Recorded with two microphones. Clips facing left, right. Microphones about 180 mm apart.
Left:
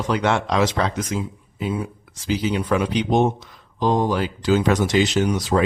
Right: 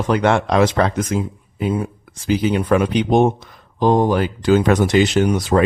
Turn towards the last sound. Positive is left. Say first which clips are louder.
# right 4 dB
turn(degrees=-55)  # may be behind; listen again after turning